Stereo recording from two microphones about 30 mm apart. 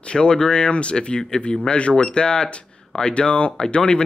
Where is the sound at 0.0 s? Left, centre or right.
Left.